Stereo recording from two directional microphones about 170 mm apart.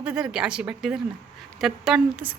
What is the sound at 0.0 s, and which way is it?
Speech, 5° right (ahead or behind).